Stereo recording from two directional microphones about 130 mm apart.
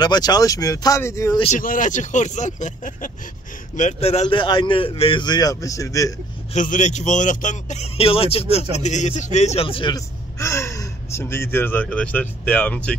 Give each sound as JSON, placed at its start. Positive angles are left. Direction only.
{"t": 0.0, "sound": "speech", "side_deg": 30}
{"t": 1.4, "sound": "speech", "side_deg": 80}
{"t": 3.7, "sound": "speech", "side_deg": 60}
{"t": 6.5, "sound": "speech", "side_deg": 75}
{"t": 8.7, "sound": "speech", "side_deg": 65}
{"t": 9.9, "sound": "speech", "side_deg": 25}